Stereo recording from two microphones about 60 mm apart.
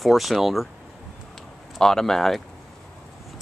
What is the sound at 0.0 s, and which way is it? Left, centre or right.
Speech, centre.